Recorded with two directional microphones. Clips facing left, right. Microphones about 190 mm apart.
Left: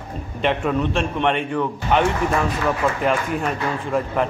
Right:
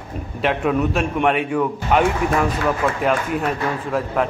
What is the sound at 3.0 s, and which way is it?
A man's voice, centre (ahead or behind).